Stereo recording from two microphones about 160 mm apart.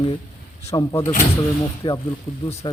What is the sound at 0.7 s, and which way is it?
A man's voice, 20° left (ahead or behind).